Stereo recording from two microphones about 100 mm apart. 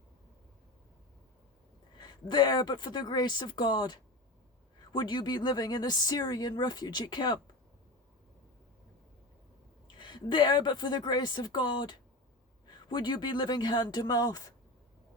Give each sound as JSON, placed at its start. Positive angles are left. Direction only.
{"t": 2.0, "sound": "a woman's voice", "side_deg": 50}
{"t": 9.8, "sound": "a woman's voice", "side_deg": 50}